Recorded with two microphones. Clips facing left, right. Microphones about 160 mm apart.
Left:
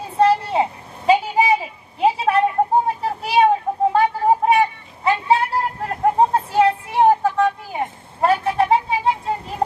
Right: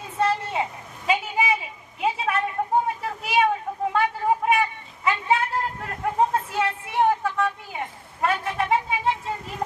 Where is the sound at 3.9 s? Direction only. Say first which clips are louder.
Left 4 dB; 30° left (ahead or behind).